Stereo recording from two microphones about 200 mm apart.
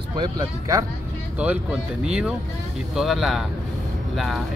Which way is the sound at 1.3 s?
5° right (ahead or behind).